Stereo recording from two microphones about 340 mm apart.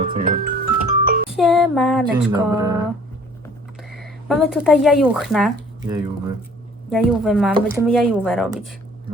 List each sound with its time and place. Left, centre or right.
0.0 s music: right
1.4 s music: centre
2.3 s speech: centre
3.8 s speech: centre
5.8 s speech: centre